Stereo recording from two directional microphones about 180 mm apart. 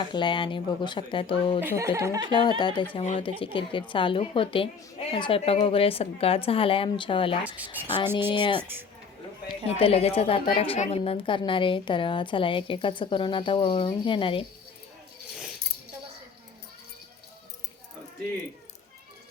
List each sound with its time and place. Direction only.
0.1 s a woman's voice: 25° left (ahead or behind)
1.6 s speech: 15° right (ahead or behind)
2.6 s a woman's voice: 25° left (ahead or behind)
7.4 s speech: 10° right (ahead or behind)
8.3 s a woman's voice: 25° left (ahead or behind)
9.6 s a woman's voice: 35° left (ahead or behind)
15.4 s a sound: 5° right (ahead or behind)